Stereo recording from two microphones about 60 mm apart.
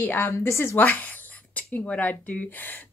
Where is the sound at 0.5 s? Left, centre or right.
Left.